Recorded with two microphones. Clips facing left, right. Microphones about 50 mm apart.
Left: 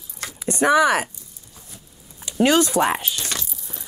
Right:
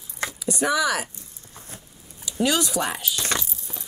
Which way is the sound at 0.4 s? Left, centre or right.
Left.